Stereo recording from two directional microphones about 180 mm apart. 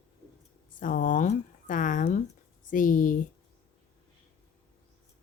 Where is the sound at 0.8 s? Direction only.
50° left (ahead or behind).